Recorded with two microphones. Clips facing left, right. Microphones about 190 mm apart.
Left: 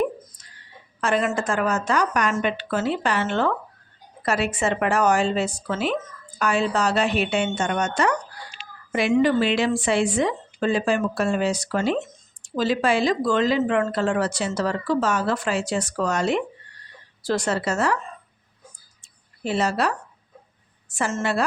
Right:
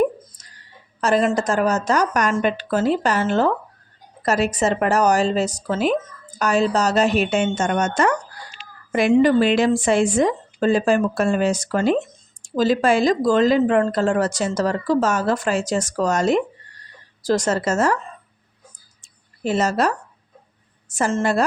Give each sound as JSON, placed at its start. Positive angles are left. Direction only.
{"t": 1.0, "sound": "speech", "side_deg": -35}
{"t": 19.0, "sound": "a sound", "side_deg": -45}
{"t": 20.9, "sound": "speech", "side_deg": -40}